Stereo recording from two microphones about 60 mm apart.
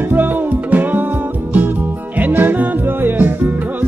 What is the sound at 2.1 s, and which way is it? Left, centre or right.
Music, right.